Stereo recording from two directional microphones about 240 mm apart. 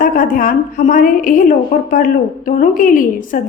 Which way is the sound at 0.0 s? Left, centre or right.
Left.